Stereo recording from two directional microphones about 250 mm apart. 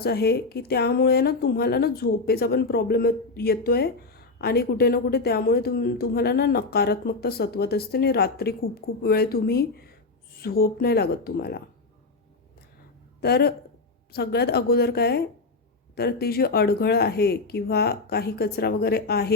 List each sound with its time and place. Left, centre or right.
0.0 s speech: left
13.2 s speech: left